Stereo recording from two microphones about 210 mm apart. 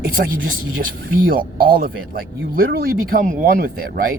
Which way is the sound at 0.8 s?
45° right (ahead or behind).